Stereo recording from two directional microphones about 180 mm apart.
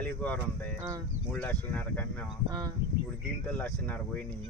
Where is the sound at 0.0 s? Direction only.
10° left (ahead or behind).